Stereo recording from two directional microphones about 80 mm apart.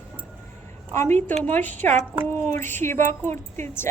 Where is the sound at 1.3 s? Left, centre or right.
Left.